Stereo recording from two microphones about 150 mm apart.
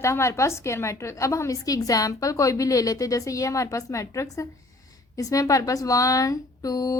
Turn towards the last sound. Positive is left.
turn(degrees=25)  # may be behind; listen again after turning